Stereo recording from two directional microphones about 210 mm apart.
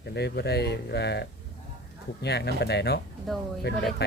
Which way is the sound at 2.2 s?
50° left (ahead or behind).